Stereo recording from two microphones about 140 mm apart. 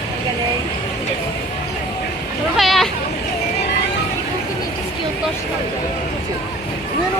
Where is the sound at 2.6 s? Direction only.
Centre (ahead or behind).